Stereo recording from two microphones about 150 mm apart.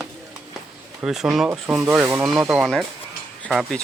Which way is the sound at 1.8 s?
15° right (ahead or behind).